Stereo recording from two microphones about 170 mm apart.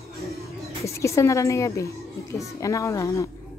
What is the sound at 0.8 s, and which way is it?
A woman's voice, 15° left (ahead or behind).